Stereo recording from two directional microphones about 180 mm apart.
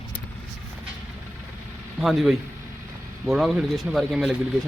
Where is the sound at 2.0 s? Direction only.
Centre (ahead or behind).